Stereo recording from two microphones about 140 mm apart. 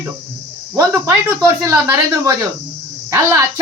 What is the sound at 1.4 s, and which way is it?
Speech, 20° right (ahead or behind).